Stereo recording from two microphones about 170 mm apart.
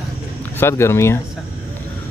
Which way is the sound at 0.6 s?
15° left (ahead or behind).